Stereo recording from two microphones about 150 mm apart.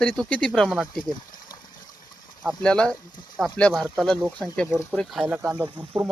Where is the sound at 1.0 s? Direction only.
30° left (ahead or behind).